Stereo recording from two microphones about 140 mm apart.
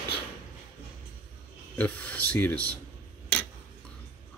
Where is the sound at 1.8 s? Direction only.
10° left (ahead or behind).